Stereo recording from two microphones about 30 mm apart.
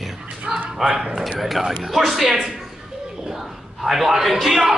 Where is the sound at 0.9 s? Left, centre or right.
Right.